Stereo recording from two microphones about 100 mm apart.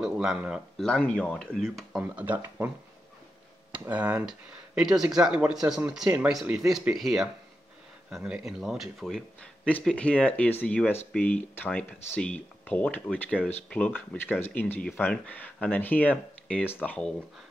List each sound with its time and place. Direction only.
0.0 s a sound: 5° right (ahead or behind)
0.7 s speech: 10° left (ahead or behind)
2.0 s speech: 15° right (ahead or behind)
3.7 s speech: 15° right (ahead or behind); by 17.1 s 15° left (ahead or behind)